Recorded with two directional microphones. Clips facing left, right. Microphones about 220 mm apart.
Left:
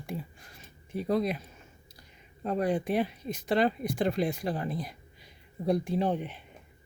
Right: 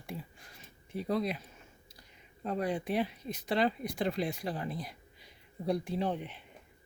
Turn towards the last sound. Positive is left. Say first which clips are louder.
# left 5 dB
turn(degrees=50)  # may be behind; listen again after turning